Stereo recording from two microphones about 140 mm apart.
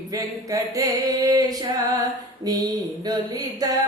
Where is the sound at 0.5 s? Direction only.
25° right (ahead or behind).